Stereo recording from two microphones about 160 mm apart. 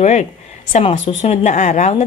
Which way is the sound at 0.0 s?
45° left (ahead or behind).